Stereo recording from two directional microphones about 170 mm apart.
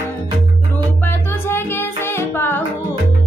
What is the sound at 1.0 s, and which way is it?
Music, 15° left (ahead or behind).